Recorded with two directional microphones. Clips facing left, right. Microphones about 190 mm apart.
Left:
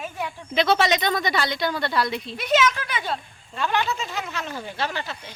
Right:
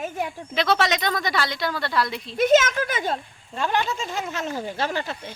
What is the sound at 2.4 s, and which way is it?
Speech, 45° right (ahead or behind).